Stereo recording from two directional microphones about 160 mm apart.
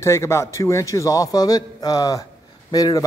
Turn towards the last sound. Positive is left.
turn(degrees=20)  # may be behind; listen again after turning